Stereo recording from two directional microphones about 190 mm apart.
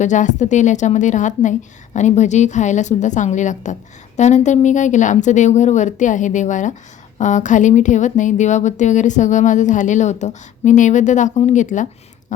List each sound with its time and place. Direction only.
0.0 s speech: 40° left (ahead or behind)